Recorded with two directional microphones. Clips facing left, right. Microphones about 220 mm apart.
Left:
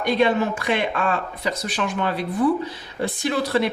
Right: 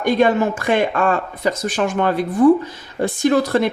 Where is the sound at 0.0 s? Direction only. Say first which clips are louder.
Right 4 dB; 45° right (ahead or behind).